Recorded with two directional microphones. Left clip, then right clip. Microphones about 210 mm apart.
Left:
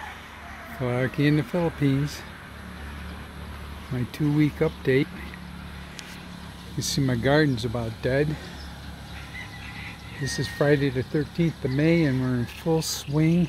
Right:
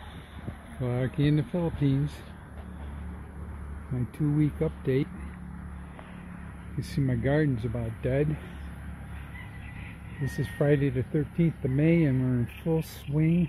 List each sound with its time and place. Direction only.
0.8 s speech: 5° left (ahead or behind)
4.4 s speech: 5° left (ahead or behind)
6.8 s speech: 5° left (ahead or behind)
10.3 s speech: centre (ahead or behind)
12.6 s speech: 10° left (ahead or behind)